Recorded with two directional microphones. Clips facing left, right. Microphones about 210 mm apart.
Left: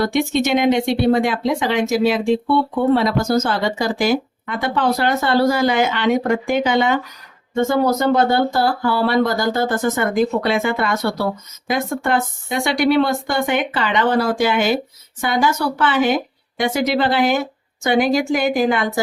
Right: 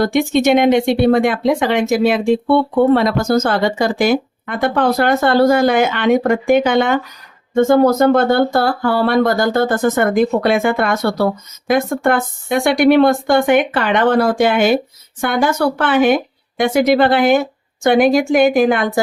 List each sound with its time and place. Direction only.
0.0 s speech: 50° right (ahead or behind)